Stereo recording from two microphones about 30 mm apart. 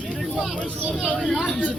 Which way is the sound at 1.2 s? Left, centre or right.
Centre.